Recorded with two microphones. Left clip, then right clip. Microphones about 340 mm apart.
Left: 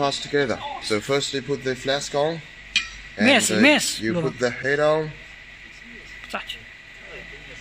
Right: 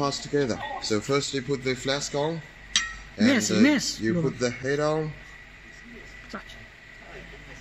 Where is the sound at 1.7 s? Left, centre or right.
Left.